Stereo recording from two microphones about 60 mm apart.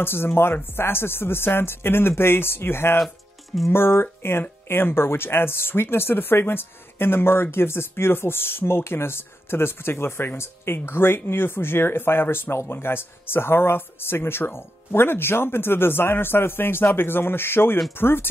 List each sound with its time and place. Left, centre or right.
0.0 s speech: left